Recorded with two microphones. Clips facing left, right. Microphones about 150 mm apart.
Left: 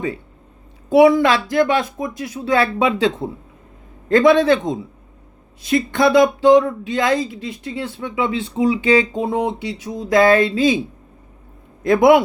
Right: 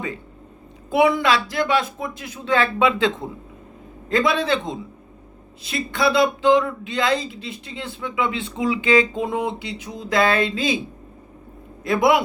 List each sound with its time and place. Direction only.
0.9 s speech: 40° left (ahead or behind)
4.3 s speech: 40° left (ahead or behind)
11.9 s speech: 50° left (ahead or behind)